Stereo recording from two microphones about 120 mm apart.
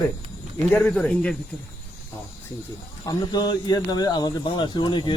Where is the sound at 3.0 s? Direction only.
35° left (ahead or behind).